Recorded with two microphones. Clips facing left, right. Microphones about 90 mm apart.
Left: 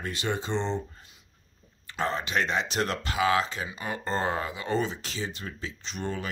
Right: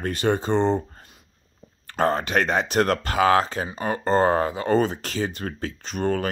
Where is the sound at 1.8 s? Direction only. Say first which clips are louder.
Right 8 dB; 50° right (ahead or behind).